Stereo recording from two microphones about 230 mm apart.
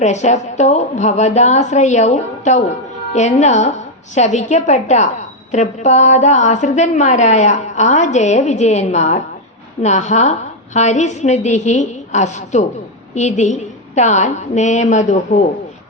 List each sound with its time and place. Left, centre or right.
0.0 s a woman's voice: left